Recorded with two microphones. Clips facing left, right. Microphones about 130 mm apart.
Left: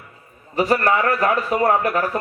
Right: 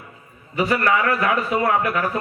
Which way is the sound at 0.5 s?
40° left (ahead or behind).